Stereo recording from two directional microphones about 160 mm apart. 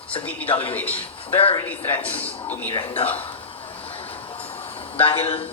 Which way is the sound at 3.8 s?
35° left (ahead or behind).